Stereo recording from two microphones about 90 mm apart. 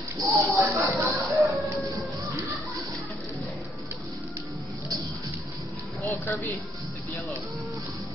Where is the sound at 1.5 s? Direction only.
Centre (ahead or behind).